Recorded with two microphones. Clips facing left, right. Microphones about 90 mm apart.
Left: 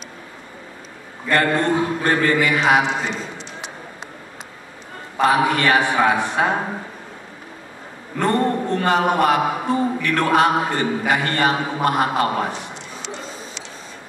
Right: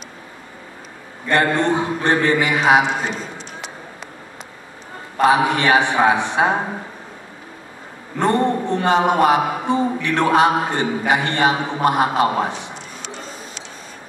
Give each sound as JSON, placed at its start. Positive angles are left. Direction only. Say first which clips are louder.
{"t": 1.3, "sound": "a man's voice", "louder": "right 1 dB", "side_deg": 0}
{"t": 1.6, "sound": "a man's voice", "louder": "right 1 dB", "side_deg": -20}
{"t": 2.4, "sound": "mantra", "louder": "right 2 dB", "side_deg": -20}
{"t": 5.2, "sound": "a man's voice", "louder": "right 1 dB", "side_deg": -20}
{"t": 8.2, "sound": "a man's voice", "louder": "right 1 dB", "side_deg": -20}